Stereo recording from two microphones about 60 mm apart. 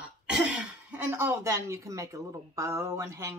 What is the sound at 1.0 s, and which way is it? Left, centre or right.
A woman's voice, right.